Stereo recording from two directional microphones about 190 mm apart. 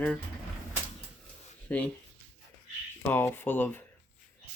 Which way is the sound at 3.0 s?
10° left (ahead or behind).